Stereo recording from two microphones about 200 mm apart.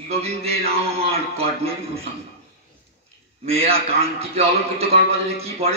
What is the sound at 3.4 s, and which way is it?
A man's voice, 30° right (ahead or behind).